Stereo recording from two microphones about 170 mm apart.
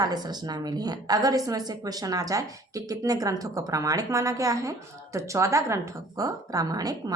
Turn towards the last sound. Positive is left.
turn(degrees=-20)  # may be behind; listen again after turning